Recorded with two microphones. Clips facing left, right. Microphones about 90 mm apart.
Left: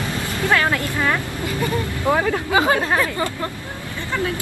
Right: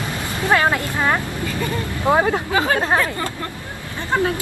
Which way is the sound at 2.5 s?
20° left (ahead or behind).